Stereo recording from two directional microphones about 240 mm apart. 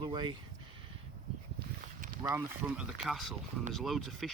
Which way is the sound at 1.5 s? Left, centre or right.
Right.